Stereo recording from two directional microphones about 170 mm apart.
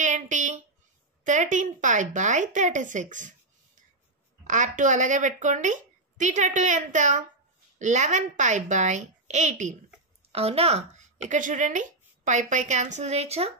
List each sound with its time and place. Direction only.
0.0 s a sound: 45° right (ahead or behind)
1.2 s a woman's voice: 45° right (ahead or behind)
4.5 s a woman's voice: 45° right (ahead or behind)